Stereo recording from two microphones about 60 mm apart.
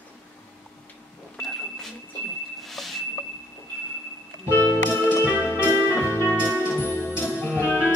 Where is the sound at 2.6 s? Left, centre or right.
Centre.